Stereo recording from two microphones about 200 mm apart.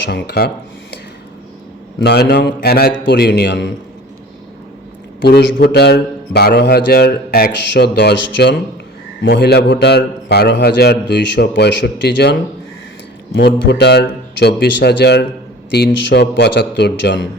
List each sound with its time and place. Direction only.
0.0 s a man's voice: 55° left (ahead or behind)
2.0 s a man's voice: 55° left (ahead or behind)
5.2 s a man's voice: 60° left (ahead or behind)